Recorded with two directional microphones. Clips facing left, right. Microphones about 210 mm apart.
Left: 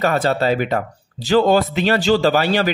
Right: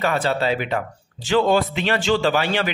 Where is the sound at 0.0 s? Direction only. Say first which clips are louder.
Left 3 dB; 40° left (ahead or behind).